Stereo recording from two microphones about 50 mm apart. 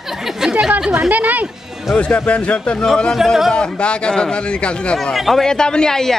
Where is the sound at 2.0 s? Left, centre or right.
Left.